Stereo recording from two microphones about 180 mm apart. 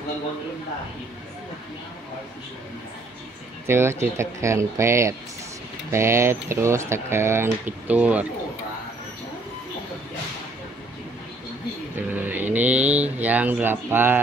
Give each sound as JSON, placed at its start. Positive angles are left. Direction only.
{"t": 3.6, "sound": "speech", "side_deg": -15}
{"t": 12.1, "sound": "speech", "side_deg": -10}